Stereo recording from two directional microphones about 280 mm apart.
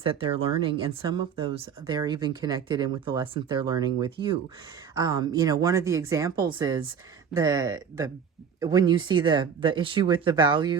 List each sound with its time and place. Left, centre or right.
0.0 s speech: centre